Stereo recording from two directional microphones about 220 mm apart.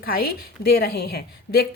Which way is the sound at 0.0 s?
45° left (ahead or behind).